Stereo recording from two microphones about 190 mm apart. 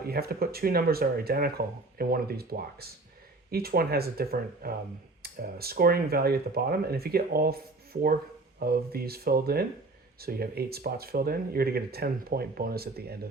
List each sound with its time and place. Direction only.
0.0 s speech: 55° right (ahead or behind)